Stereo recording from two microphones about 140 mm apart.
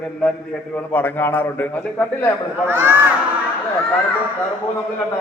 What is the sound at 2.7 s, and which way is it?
Speech, 15° right (ahead or behind).